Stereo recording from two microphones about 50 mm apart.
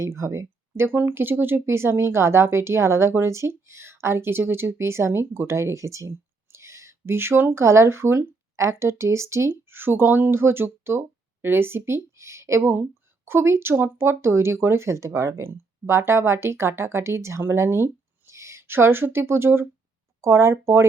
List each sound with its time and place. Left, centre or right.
0.2 s speech: right
7.5 s a woman's voice: right
13.2 s speech: right
15.4 s speech: right